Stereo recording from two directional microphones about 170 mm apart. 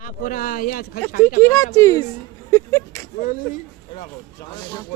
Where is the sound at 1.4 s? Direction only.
15° left (ahead or behind).